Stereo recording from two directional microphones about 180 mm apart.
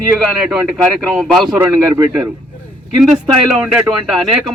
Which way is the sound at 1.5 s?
15° right (ahead or behind).